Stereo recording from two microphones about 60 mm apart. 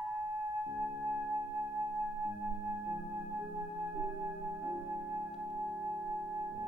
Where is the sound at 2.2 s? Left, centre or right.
Right.